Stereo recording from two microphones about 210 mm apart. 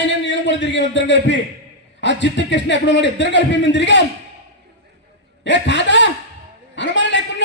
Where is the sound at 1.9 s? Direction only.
60° left (ahead or behind).